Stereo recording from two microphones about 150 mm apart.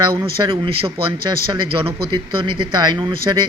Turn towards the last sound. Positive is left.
turn(degrees=-30)  # may be behind; listen again after turning